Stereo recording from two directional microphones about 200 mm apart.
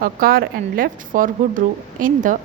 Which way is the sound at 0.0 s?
45° right (ahead or behind).